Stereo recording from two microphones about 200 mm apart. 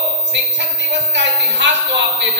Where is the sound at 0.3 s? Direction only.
60° right (ahead or behind).